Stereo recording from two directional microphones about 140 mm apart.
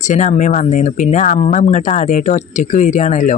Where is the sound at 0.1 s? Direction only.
60° left (ahead or behind).